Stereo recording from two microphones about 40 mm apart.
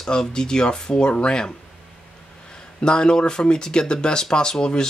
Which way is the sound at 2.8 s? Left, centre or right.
Left.